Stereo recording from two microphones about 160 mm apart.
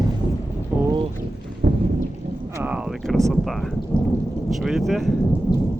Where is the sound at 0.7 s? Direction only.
10° right (ahead or behind).